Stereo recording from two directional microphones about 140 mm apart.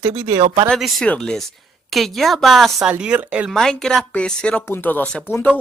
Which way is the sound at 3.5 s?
5° left (ahead or behind).